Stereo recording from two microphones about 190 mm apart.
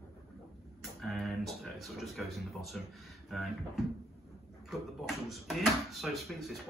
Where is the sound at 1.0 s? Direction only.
Centre (ahead or behind).